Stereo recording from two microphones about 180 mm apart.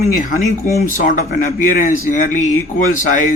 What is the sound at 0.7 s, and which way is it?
Speech, 55° left (ahead or behind).